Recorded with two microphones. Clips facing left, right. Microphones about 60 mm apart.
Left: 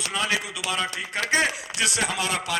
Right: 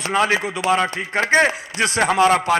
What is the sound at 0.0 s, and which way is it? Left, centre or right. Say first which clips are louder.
A man's voice: right 8 dB; right.